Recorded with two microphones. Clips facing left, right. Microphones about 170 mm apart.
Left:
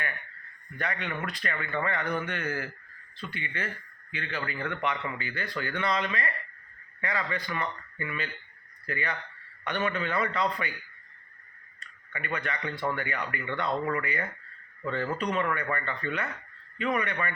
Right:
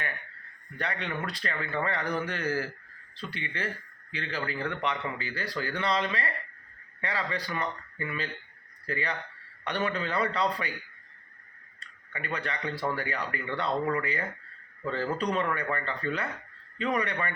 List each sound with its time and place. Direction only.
0.8 s a man's voice: 30° right (ahead or behind)
11.8 s a man's voice: 30° right (ahead or behind)